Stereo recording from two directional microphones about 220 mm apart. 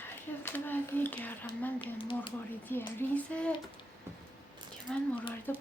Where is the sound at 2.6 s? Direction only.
10° left (ahead or behind).